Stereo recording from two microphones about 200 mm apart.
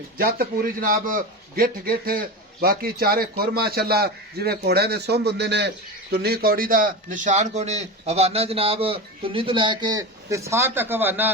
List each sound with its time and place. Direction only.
0.2 s a man's voice: 45° right (ahead or behind); by 11.3 s 10° right (ahead or behind)